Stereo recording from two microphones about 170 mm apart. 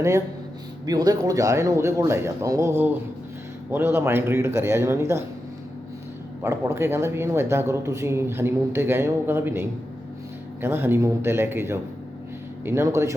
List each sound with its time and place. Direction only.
0.9 s speech: 20° right (ahead or behind)
6.4 s speech: 15° right (ahead or behind)